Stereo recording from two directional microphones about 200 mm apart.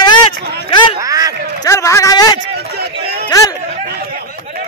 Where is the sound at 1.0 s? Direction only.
15° right (ahead or behind).